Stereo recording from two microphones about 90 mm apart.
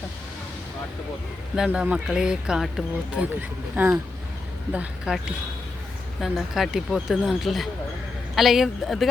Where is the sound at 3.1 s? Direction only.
15° right (ahead or behind).